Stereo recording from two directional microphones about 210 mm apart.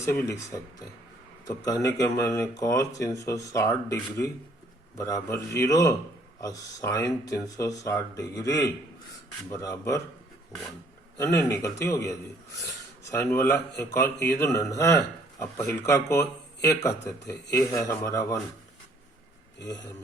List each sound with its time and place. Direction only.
0.0 s speech: 15° left (ahead or behind)
11.3 s speech: 10° left (ahead or behind)